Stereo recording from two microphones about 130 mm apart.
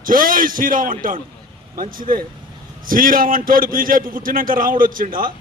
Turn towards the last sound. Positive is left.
turn(degrees=-90)